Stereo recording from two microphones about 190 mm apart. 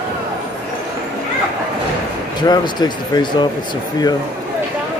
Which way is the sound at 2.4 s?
20° left (ahead or behind).